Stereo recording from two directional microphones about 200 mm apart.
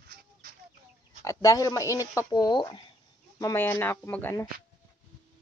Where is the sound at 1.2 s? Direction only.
15° left (ahead or behind).